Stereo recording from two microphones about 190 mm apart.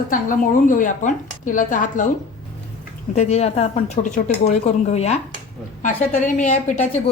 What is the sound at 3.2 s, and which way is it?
Speech, 35° left (ahead or behind).